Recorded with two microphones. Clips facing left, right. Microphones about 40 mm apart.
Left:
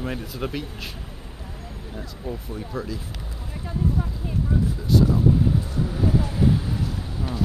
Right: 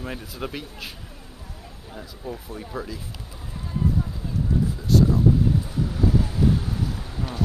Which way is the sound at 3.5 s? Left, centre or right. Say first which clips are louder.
Even; centre.